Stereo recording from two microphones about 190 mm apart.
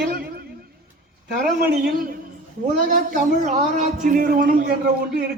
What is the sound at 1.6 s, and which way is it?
Speech, 50° right (ahead or behind).